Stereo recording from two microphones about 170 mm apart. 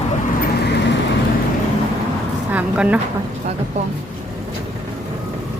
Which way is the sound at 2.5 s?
10° right (ahead or behind).